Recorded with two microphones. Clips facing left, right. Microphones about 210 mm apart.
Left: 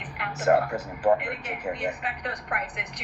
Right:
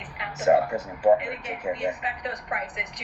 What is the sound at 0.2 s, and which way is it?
Speech, 5° right (ahead or behind).